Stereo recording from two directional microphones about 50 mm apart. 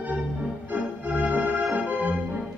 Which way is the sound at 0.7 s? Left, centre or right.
Right.